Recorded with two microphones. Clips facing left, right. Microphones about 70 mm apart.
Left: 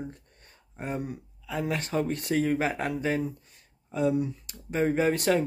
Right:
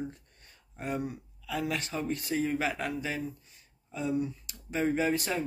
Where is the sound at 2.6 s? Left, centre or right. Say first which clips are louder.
Left 3 dB; left.